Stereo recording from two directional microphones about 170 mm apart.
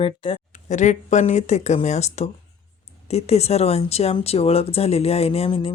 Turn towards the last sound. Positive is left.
turn(degrees=35)  # may be behind; listen again after turning